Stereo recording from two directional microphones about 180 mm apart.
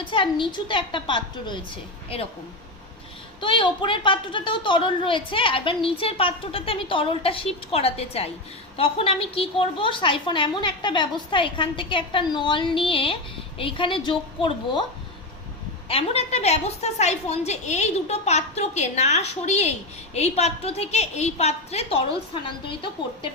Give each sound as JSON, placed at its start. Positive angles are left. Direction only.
{"t": 0.0, "sound": "a woman's voice", "side_deg": 30}
{"t": 3.4, "sound": "a woman's voice", "side_deg": 25}
{"t": 15.9, "sound": "a woman's voice", "side_deg": 35}